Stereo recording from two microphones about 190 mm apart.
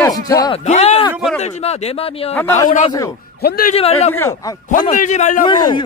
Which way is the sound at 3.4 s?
55° left (ahead or behind).